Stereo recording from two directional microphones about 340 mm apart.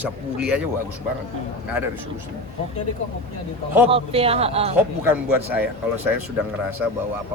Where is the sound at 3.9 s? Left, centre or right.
Centre.